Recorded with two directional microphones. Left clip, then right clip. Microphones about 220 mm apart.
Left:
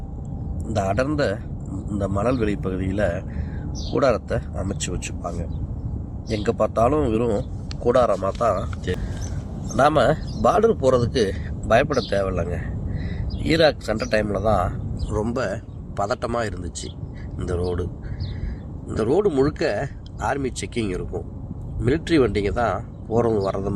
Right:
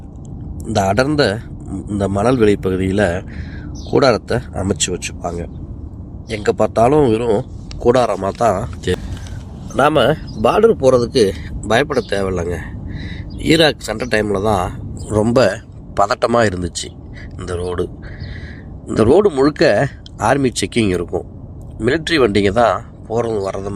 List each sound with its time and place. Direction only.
0.6 s speech: 50° right (ahead or behind)
9.7 s speech: 20° right (ahead or behind); by 17.8 s 40° right (ahead or behind)
18.9 s speech: 40° right (ahead or behind)